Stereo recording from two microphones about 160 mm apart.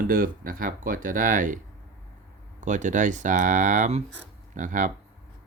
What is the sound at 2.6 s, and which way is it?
Speech, 50° right (ahead or behind).